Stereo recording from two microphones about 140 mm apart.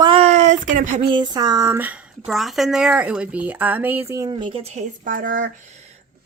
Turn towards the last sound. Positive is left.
turn(degrees=-60)  # may be behind; listen again after turning